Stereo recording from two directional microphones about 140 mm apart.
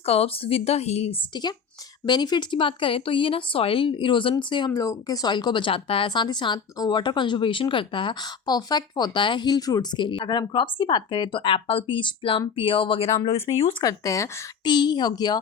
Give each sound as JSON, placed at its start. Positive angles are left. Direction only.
{"t": 0.0, "sound": "speech", "side_deg": 45}
{"t": 1.3, "sound": "speech", "side_deg": 30}
{"t": 4.7, "sound": "speech", "side_deg": 20}
{"t": 13.6, "sound": "speech", "side_deg": 25}